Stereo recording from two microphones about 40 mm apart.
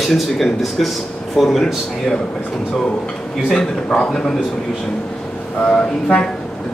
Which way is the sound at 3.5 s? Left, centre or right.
Left.